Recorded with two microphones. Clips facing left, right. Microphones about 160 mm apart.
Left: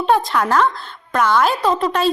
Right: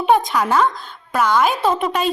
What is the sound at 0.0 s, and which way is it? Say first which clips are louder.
A woman's voice: even; 10° right (ahead or behind).